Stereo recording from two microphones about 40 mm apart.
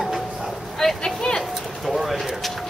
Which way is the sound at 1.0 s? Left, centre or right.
Centre.